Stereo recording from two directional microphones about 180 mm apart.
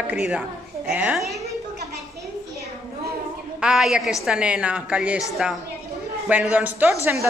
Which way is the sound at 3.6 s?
5° right (ahead or behind).